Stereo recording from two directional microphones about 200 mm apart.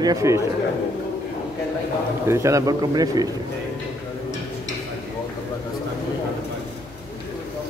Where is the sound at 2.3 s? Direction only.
15° right (ahead or behind).